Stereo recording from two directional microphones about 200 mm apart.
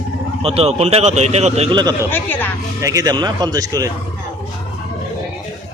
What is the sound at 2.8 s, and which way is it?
A man's voice, 15° right (ahead or behind).